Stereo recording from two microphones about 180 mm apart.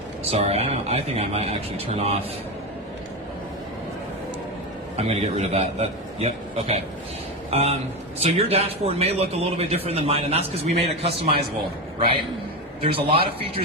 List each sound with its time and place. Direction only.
0.3 s a man's voice: 35° right (ahead or behind)
4.9 s a man's voice: 35° right (ahead or behind)
12.8 s a man's voice: 30° right (ahead or behind)